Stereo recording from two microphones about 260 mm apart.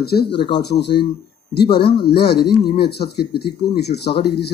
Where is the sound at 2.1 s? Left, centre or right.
Left.